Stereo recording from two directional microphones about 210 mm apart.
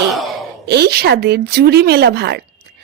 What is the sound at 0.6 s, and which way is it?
Speech, 50° right (ahead or behind).